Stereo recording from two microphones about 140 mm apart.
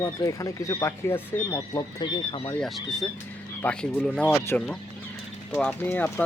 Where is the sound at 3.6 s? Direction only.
10° left (ahead or behind).